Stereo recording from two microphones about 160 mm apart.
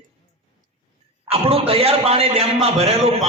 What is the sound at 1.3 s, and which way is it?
A man's voice, 35° right (ahead or behind).